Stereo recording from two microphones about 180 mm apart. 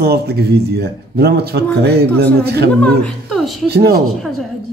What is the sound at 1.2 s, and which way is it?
Speech, 60° right (ahead or behind).